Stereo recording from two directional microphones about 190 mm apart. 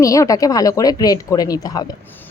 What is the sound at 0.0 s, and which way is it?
Speech, 15° left (ahead or behind).